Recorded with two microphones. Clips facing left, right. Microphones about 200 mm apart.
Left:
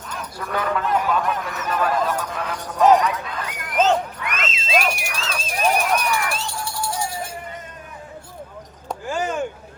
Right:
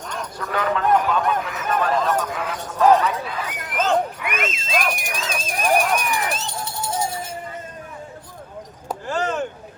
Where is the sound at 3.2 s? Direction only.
5° right (ahead or behind).